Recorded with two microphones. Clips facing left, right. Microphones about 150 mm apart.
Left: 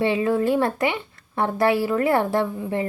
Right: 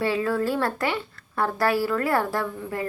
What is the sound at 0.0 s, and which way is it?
A woman's voice, 20° left (ahead or behind).